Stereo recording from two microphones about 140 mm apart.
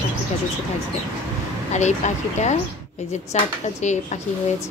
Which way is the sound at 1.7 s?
55° left (ahead or behind).